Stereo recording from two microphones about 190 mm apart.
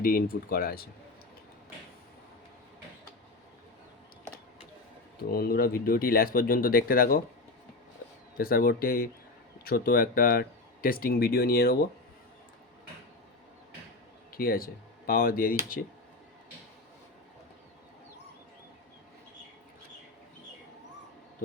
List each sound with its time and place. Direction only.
0.0 s speech: 50° left (ahead or behind)
5.3 s speech: 55° left (ahead or behind)
8.4 s speech: 50° left (ahead or behind)
14.3 s speech: 50° left (ahead or behind)